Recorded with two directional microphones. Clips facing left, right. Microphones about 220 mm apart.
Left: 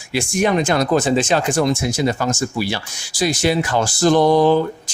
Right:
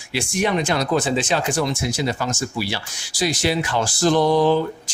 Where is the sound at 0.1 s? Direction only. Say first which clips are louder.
Left 4 dB; 45° left (ahead or behind).